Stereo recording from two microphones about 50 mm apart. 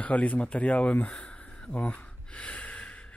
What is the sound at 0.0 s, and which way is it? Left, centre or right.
Speech, left.